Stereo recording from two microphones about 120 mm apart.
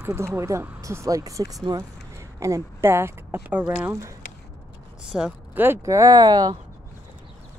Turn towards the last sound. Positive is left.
turn(degrees=-35)  # may be behind; listen again after turning